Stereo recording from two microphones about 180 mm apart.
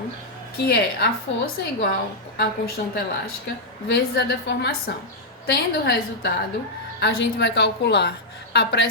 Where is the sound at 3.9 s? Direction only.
65° left (ahead or behind).